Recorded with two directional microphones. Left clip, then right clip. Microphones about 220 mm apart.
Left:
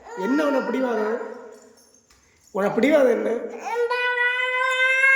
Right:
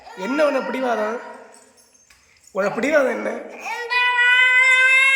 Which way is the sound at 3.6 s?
20° left (ahead or behind).